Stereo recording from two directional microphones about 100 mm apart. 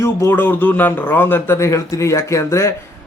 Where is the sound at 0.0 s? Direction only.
25° left (ahead or behind).